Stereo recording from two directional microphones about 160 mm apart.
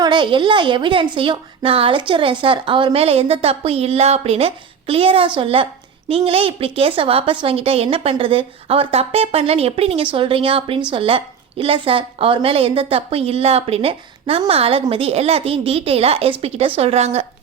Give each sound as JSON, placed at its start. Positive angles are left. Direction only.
{"t": 0.0, "sound": "a woman's voice", "side_deg": -30}